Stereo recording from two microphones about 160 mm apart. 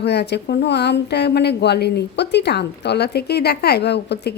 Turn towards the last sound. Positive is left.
turn(degrees=90)